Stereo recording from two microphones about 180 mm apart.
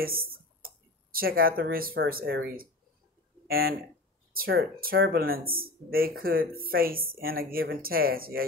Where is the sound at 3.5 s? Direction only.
55° right (ahead or behind).